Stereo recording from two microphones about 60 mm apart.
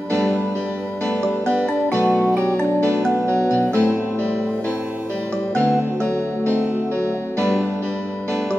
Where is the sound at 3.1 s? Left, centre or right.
Right.